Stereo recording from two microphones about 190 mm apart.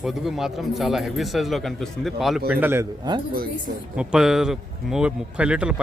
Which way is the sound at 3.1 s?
20° right (ahead or behind).